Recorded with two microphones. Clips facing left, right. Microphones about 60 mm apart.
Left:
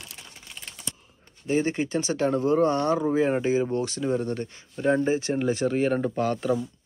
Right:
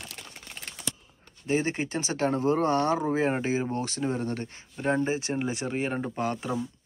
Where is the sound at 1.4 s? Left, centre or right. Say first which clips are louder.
Left 3 dB; right.